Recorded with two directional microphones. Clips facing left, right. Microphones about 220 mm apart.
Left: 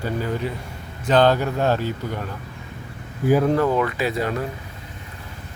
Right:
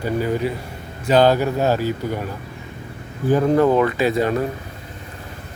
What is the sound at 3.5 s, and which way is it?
Speech, 30° right (ahead or behind).